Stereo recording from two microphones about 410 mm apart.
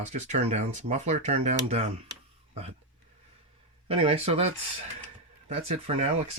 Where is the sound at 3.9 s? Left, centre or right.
Centre.